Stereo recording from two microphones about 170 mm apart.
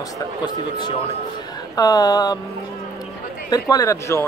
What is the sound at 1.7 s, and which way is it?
Speech, 20° left (ahead or behind).